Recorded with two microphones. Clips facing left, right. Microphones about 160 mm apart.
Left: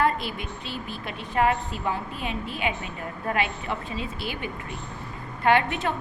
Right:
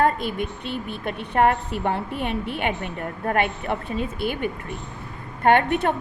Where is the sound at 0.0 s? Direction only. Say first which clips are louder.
Right 4 dB; 50° right (ahead or behind).